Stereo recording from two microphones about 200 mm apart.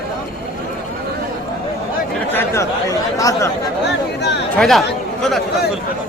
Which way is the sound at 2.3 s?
10° left (ahead or behind).